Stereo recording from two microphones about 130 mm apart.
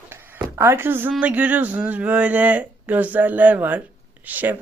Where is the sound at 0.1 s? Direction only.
15° right (ahead or behind).